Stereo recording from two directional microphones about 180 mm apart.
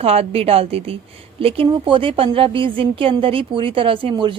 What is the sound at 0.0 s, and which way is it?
A woman's voice, 35° right (ahead or behind).